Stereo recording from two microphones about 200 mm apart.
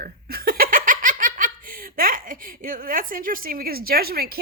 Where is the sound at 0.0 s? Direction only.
50° right (ahead or behind).